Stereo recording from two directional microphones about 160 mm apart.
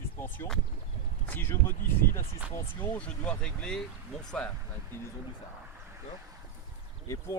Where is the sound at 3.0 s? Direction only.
5° left (ahead or behind).